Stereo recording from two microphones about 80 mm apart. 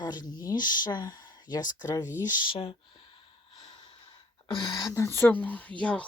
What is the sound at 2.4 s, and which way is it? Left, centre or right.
Speech, left.